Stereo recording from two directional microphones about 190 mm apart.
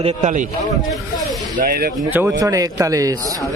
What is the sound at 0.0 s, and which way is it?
Speech, 40° right (ahead or behind).